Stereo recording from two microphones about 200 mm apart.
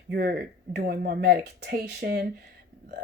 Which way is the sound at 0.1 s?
55° right (ahead or behind).